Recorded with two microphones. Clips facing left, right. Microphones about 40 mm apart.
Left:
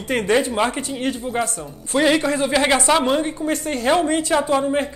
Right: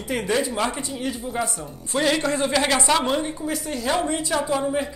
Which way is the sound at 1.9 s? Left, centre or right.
Centre.